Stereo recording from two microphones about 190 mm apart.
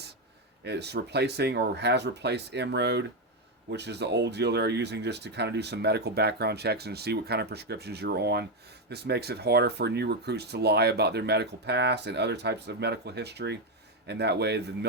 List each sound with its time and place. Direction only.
0.6 s speech: 60° right (ahead or behind)